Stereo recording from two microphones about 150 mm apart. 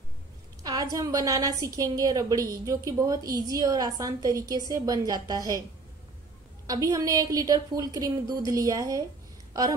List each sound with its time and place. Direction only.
0.9 s a woman's voice: 25° right (ahead or behind)
6.7 s a woman's voice: 25° right (ahead or behind)